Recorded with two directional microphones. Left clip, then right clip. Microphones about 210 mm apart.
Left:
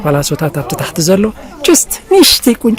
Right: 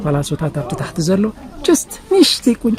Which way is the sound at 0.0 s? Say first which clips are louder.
Left 7 dB; 45° left (ahead or behind).